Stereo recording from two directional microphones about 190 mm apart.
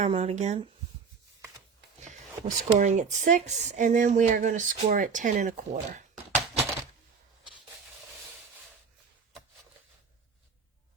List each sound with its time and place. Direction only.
0.0 s a woman's voice: 35° right (ahead or behind)
2.0 s a woman's voice: 40° right (ahead or behind)